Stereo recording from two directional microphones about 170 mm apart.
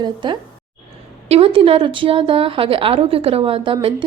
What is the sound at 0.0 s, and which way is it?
A woman's voice, 30° right (ahead or behind).